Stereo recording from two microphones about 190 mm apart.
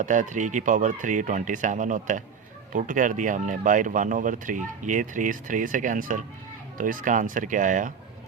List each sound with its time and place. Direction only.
0.0 s speech: 40° right (ahead or behind)